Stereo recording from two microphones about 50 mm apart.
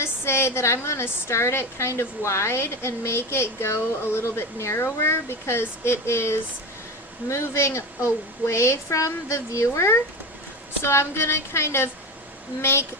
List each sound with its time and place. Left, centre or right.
0.0 s a woman's voice: left